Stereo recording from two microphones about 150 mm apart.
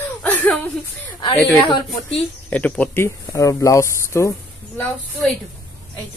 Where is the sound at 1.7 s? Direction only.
30° left (ahead or behind).